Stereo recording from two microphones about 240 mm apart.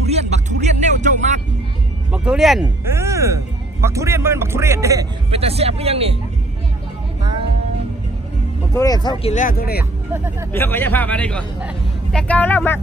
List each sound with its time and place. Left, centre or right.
0.0 s speech: right
2.1 s speech: centre
5.3 s speech: right
8.7 s a man's voice: centre
9.3 s speech: left
10.5 s a man's voice: centre